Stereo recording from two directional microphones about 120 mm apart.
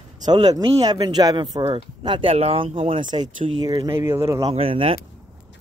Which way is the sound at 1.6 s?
45° right (ahead or behind).